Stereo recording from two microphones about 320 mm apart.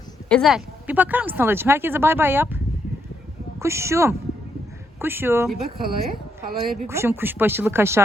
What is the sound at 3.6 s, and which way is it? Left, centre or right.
Speech, centre.